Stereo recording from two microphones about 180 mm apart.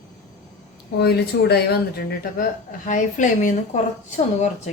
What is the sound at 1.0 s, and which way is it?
Speech, 65° left (ahead or behind).